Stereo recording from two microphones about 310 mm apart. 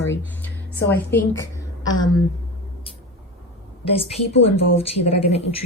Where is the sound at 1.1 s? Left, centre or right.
Centre.